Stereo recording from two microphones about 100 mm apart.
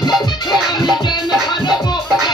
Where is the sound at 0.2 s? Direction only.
45° left (ahead or behind).